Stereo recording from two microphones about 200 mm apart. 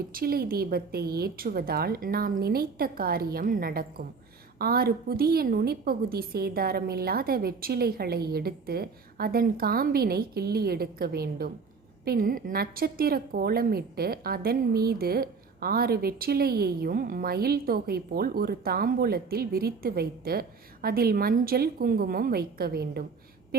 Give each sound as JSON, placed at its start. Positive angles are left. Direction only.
{"t": 0.1, "sound": "a woman's voice", "side_deg": -50}